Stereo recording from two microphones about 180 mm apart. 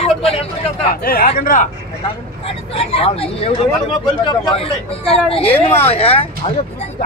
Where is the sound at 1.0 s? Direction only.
55° left (ahead or behind).